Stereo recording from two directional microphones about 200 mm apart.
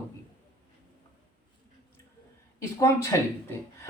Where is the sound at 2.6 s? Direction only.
15° left (ahead or behind).